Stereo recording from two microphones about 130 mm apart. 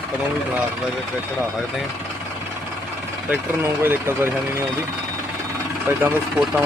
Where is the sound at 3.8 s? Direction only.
15° right (ahead or behind).